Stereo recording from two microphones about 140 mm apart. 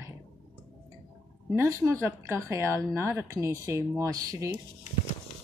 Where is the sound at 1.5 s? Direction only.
20° right (ahead or behind).